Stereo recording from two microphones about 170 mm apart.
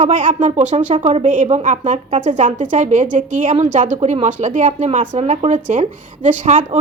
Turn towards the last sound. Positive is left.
turn(degrees=-45)  # may be behind; listen again after turning